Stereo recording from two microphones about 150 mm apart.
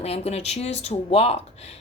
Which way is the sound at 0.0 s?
45° left (ahead or behind).